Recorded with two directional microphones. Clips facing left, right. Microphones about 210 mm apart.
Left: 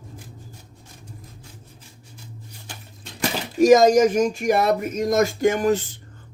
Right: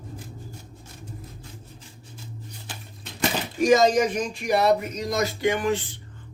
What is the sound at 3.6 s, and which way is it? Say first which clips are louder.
Speech: left 5 dB; 45° left (ahead or behind).